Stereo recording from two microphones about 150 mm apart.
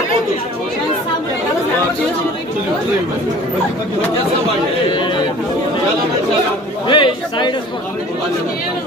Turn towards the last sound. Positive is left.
turn(degrees=30)  # may be behind; listen again after turning